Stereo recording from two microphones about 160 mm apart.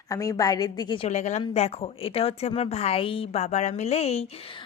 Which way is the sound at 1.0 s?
45° left (ahead or behind).